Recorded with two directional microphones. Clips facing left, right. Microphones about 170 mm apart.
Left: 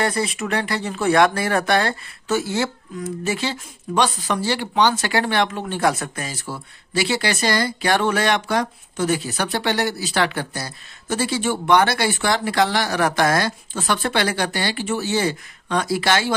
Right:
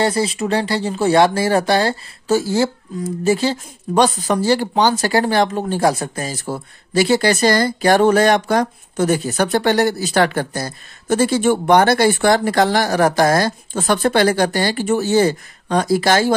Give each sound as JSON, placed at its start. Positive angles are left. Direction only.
{"t": 0.0, "sound": "speech", "side_deg": -30}